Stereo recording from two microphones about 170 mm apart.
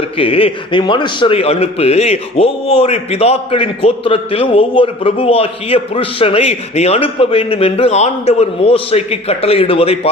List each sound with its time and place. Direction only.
0.2 s a man's voice: 35° left (ahead or behind)